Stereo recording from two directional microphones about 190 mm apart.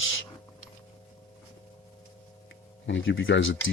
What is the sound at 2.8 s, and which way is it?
Speech, 75° left (ahead or behind).